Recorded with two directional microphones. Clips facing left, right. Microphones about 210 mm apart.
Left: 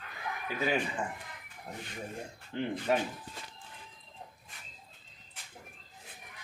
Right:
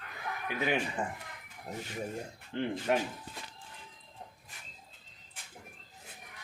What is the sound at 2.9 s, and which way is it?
Speech, 5° right (ahead or behind).